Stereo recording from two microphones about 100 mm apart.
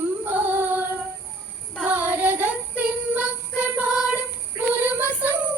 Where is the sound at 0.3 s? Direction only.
20° right (ahead or behind).